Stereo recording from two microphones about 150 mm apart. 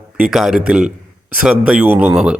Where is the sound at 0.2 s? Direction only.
Centre (ahead or behind).